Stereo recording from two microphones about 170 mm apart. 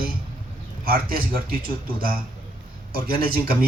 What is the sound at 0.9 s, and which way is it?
Speech, 60° right (ahead or behind).